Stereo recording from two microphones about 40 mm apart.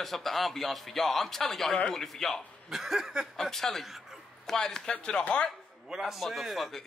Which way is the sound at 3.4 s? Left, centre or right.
Centre.